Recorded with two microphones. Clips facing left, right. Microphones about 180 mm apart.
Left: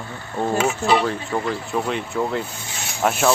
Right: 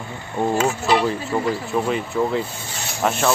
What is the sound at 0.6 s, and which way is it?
Speech, 15° left (ahead or behind).